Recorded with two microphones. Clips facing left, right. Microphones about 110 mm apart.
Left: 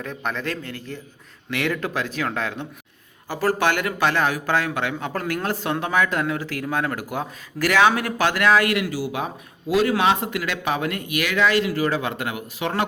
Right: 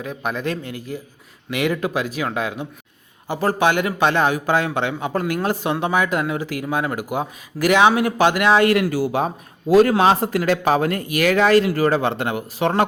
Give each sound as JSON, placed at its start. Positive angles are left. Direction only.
{"t": 0.0, "sound": "a man's voice", "side_deg": -10}
{"t": 8.7, "sound": "speech", "side_deg": -45}